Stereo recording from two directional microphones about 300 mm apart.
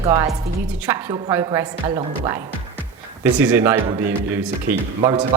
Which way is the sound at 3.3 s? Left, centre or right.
Centre.